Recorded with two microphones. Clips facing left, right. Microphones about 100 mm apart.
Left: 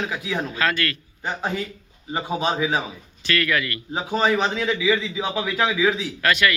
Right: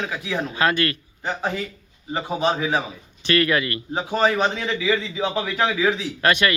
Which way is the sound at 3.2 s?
25° right (ahead or behind).